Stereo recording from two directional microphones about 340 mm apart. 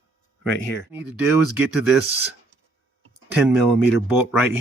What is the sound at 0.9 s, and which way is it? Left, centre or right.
Speech, centre.